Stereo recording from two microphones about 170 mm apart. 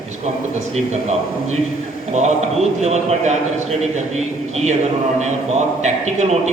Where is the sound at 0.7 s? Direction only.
40° right (ahead or behind).